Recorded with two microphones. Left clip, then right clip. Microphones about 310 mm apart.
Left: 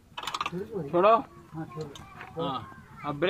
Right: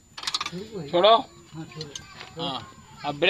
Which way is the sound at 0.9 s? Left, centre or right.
Right.